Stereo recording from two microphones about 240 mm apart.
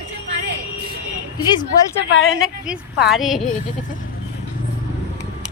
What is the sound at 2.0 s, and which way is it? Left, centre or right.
Speech, left.